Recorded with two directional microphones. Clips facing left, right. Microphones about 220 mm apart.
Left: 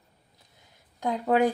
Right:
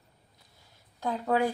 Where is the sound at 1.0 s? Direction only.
15° left (ahead or behind).